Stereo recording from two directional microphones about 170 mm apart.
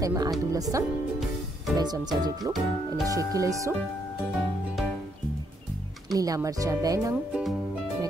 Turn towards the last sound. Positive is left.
turn(degrees=-20)  # may be behind; listen again after turning